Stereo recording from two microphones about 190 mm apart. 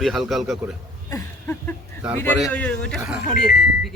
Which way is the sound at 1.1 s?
10° left (ahead or behind).